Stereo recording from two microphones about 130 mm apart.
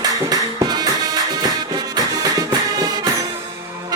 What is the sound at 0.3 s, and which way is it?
Music, 30° right (ahead or behind).